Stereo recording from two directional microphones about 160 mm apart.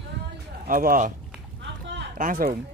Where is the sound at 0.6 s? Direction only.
60° right (ahead or behind).